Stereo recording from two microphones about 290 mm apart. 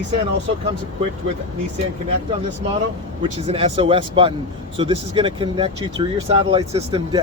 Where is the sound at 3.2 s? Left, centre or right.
Centre.